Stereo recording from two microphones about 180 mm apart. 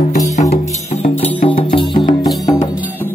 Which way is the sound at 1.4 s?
30° left (ahead or behind).